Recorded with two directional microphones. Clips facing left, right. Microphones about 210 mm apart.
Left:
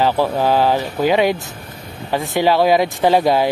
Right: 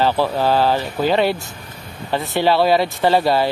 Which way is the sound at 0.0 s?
15° left (ahead or behind).